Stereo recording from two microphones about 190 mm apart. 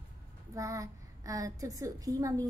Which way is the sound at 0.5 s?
15° right (ahead or behind).